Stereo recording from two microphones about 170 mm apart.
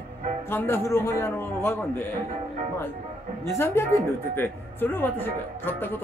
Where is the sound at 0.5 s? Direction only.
15° left (ahead or behind).